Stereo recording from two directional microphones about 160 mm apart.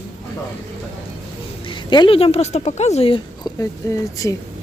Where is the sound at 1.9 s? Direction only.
30° left (ahead or behind).